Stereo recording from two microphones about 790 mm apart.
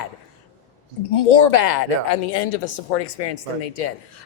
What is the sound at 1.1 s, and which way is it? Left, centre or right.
Speech, left.